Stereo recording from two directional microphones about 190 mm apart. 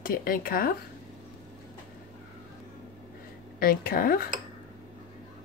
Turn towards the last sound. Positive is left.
turn(degrees=50)  # may be behind; listen again after turning